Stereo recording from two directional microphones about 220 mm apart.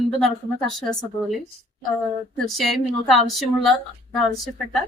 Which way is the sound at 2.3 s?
Centre (ahead or behind).